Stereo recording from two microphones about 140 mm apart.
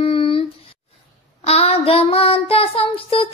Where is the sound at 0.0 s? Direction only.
40° left (ahead or behind).